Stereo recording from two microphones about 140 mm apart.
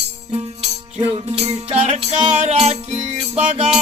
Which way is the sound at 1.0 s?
45° right (ahead or behind).